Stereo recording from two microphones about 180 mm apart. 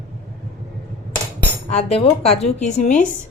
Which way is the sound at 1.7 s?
35° left (ahead or behind).